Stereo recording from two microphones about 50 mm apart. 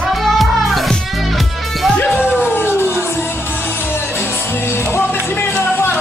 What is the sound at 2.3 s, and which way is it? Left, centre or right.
Music, left.